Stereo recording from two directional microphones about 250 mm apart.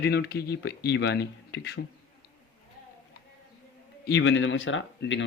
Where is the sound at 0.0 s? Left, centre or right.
Left.